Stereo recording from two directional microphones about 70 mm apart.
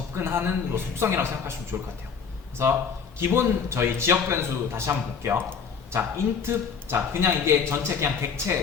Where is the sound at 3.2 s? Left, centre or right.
Right.